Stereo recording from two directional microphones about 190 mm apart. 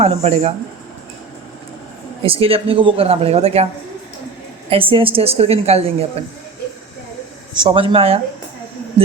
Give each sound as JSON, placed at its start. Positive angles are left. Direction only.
{"t": 0.0, "sound": "speech", "side_deg": -35}
{"t": 2.2, "sound": "speech", "side_deg": -30}
{"t": 4.7, "sound": "speech", "side_deg": -30}
{"t": 7.5, "sound": "speech", "side_deg": -25}